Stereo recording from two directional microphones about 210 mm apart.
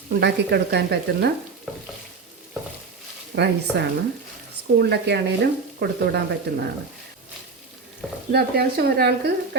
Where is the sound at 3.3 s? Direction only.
50° right (ahead or behind).